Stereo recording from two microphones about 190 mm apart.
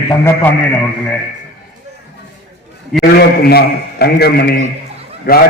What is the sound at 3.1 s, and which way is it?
A man's voice, 55° left (ahead or behind).